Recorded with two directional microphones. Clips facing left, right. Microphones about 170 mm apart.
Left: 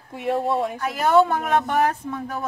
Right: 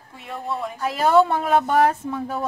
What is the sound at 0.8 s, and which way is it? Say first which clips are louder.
Speech: right 4 dB; 30° right (ahead or behind).